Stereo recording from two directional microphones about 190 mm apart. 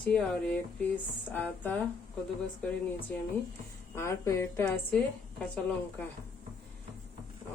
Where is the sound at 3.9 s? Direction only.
15° left (ahead or behind).